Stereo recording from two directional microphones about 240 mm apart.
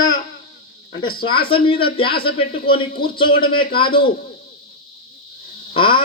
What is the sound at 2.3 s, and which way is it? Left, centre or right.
Speech, left.